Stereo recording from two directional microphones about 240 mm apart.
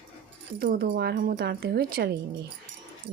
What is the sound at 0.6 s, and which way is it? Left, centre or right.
Speech, right.